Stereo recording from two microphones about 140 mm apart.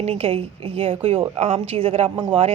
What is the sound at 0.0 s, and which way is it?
A woman's voice, 45° right (ahead or behind).